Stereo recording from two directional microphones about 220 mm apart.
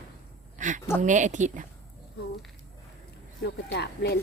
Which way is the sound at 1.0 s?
35° right (ahead or behind).